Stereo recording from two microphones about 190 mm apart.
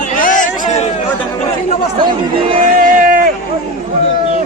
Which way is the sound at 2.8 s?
45° right (ahead or behind).